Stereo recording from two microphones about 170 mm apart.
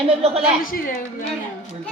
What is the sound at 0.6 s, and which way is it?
Speech, 55° left (ahead or behind).